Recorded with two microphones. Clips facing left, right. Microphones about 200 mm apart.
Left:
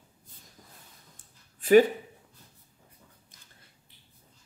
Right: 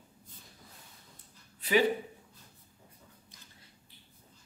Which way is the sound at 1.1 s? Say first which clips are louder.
Right 2 dB; 50° left (ahead or behind).